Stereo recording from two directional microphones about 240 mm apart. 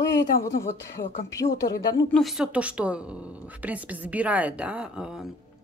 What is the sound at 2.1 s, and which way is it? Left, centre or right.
Speech, centre.